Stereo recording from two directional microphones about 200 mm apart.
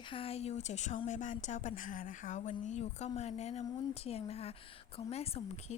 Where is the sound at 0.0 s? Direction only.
25° left (ahead or behind).